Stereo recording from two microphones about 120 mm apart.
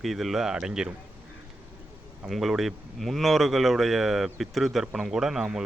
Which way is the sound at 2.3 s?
Centre (ahead or behind).